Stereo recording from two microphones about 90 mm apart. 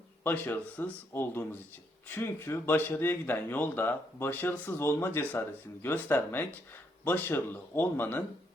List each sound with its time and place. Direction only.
0.3 s speech: 20° left (ahead or behind)